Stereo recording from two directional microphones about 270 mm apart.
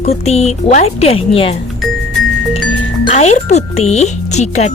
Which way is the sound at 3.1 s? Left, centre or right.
Left.